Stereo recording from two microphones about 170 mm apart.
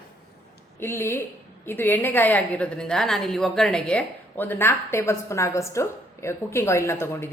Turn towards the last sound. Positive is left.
turn(degrees=15)  # may be behind; listen again after turning